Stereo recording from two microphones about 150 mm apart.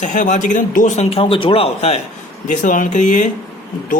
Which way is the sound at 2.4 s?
60° left (ahead or behind).